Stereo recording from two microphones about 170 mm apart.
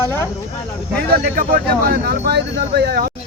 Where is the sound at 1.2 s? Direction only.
60° right (ahead or behind).